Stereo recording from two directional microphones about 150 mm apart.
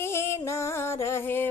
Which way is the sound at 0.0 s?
15° left (ahead or behind).